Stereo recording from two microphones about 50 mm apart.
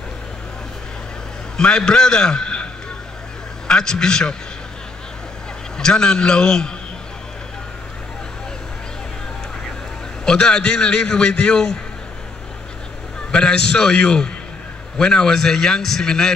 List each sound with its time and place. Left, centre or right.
1.6 s a man's voice: centre
5.8 s a man's voice: centre
10.2 s a man's voice: centre
13.3 s a man's voice: centre